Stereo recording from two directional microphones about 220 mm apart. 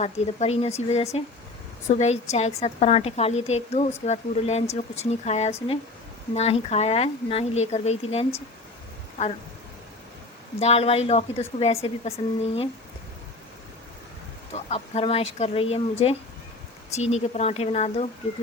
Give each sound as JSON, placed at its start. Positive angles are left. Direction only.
{"t": 0.0, "sound": "a woman's voice", "side_deg": 30}
{"t": 10.6, "sound": "a woman's voice", "side_deg": 25}
{"t": 14.5, "sound": "a woman's voice", "side_deg": 30}